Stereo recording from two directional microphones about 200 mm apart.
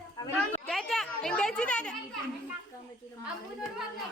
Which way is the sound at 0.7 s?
Centre (ahead or behind).